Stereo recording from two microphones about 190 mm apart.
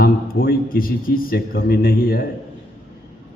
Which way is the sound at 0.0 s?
50° left (ahead or behind).